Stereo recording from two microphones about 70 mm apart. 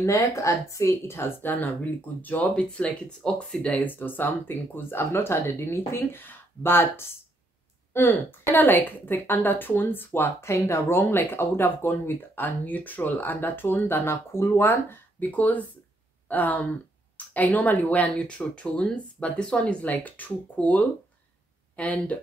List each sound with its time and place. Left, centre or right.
0.0 s a woman's voice: left
1.5 s a woman's voice: left